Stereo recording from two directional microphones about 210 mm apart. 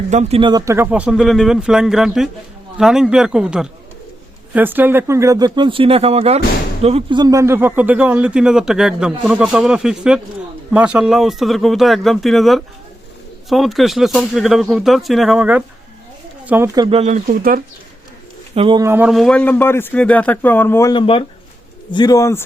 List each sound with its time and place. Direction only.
0.1 s speech: 30° right (ahead or behind)
18.5 s a man's voice: 25° right (ahead or behind); by 22.4 s 15° left (ahead or behind)